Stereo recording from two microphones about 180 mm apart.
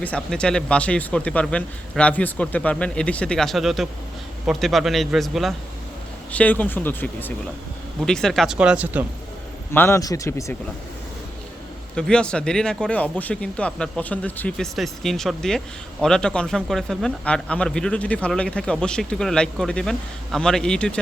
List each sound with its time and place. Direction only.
0.0 s speech: 5° left (ahead or behind)
9.7 s speech: 15° left (ahead or behind)
11.9 s speech: 5° left (ahead or behind)